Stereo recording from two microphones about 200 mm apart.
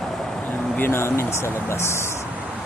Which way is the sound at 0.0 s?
Centre (ahead or behind).